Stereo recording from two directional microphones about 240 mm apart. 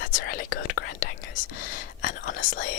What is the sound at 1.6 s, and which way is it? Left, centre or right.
Speech, left.